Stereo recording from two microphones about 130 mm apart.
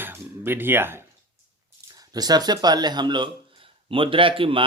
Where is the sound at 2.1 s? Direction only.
30° right (ahead or behind).